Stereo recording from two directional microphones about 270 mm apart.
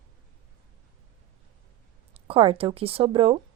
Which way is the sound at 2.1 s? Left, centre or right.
Centre.